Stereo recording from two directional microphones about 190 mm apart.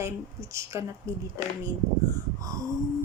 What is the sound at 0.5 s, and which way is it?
Speech, 15° right (ahead or behind).